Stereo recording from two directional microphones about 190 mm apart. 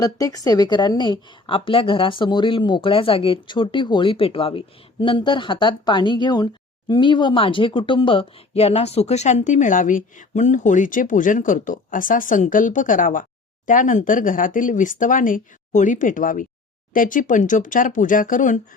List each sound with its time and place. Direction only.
0.0 s a woman's voice: 20° left (ahead or behind); by 18.6 s 40° left (ahead or behind)